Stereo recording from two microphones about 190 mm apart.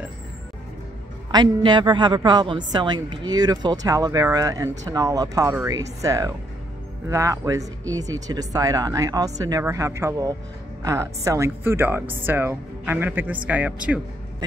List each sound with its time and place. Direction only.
1.3 s a woman's voice: 25° right (ahead or behind); by 14.0 s 5° right (ahead or behind)